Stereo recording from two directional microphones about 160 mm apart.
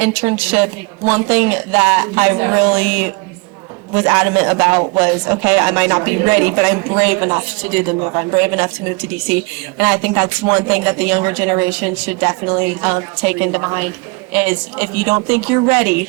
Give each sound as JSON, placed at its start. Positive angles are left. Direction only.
{"t": 0.0, "sound": "a woman's voice", "side_deg": -15}